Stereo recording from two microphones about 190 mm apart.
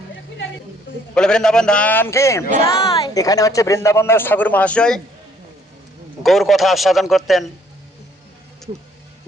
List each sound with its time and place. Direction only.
1.1 s a man's voice: 5° left (ahead or behind)
2.6 s speech: 30° left (ahead or behind); by 4.9 s 5° left (ahead or behind)
6.2 s a man's voice: centre (ahead or behind)